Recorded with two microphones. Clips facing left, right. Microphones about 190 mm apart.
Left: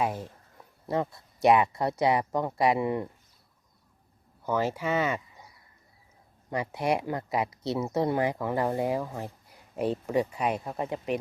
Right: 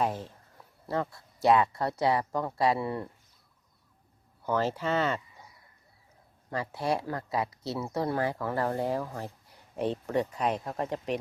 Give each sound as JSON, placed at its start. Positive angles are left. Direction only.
{"t": 0.0, "sound": "speech", "side_deg": 10}
{"t": 4.4, "sound": "speech", "side_deg": 10}
{"t": 6.5, "sound": "speech", "side_deg": 15}